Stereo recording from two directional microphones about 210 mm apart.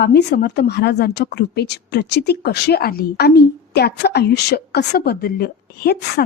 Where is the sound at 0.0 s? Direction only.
50° left (ahead or behind).